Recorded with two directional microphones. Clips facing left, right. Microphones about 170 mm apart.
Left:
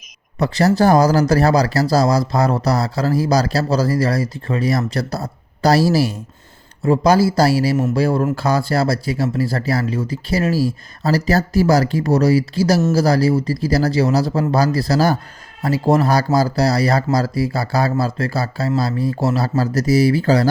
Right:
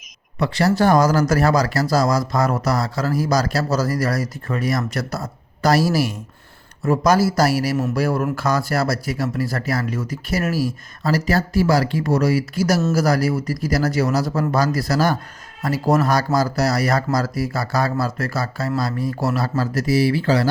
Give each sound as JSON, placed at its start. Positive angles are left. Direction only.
{"t": 0.3, "sound": "speech", "side_deg": 40}